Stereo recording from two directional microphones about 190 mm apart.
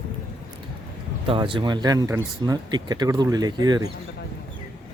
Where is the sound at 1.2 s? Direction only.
25° right (ahead or behind).